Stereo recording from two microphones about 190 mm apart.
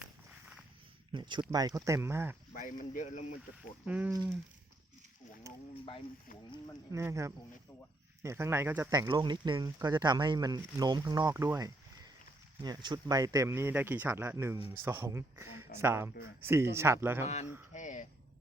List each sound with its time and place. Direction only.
1.1 s speech: 25° right (ahead or behind)
2.5 s speech: 45° left (ahead or behind)
3.8 s speech: 5° right (ahead or behind)
5.5 s speech: 15° right (ahead or behind)
6.9 s speech: 15° right (ahead or behind)
17.7 s speech: 40° left (ahead or behind)